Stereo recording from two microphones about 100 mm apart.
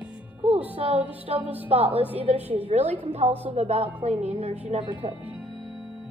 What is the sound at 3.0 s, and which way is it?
Music, 90° right.